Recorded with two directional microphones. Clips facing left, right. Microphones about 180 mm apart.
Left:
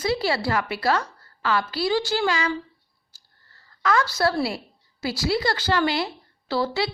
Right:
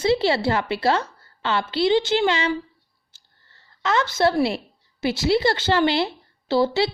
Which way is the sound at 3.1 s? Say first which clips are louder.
Even; 25° right (ahead or behind).